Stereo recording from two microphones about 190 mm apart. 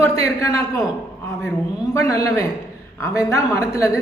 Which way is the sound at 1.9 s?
15° left (ahead or behind).